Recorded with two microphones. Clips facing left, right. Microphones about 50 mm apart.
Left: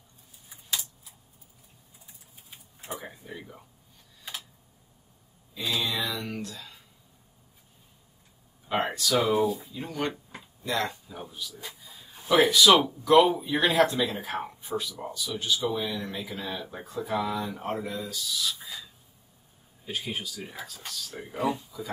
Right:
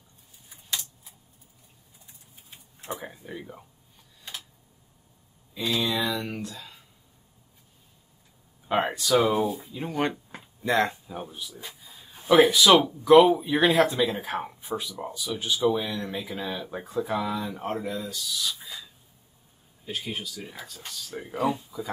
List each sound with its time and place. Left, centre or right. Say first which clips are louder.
0.5 s keys jangling: even; centre
3.1 s speech: right 3 dB; centre
4.2 s tick-tock: left 1 dB; centre
5.5 s speech: right 3 dB; centre
8.6 s speech: right 3 dB; centre
11.8 s a sound: even; centre
12.4 s speech: right 1 dB; centre